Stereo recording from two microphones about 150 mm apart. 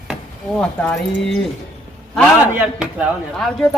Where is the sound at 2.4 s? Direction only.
10° right (ahead or behind).